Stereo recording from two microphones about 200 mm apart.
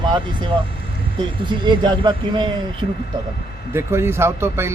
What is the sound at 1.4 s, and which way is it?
Speech, 25° right (ahead or behind).